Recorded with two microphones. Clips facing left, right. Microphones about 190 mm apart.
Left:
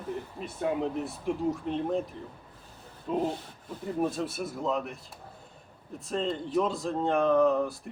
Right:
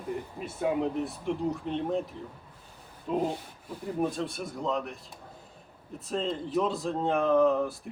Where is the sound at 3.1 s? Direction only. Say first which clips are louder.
Even; centre (ahead or behind).